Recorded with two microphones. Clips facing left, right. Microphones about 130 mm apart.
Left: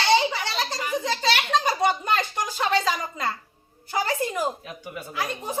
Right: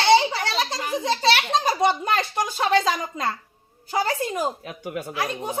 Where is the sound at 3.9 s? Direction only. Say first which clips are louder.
Right 1 dB; 25° right (ahead or behind).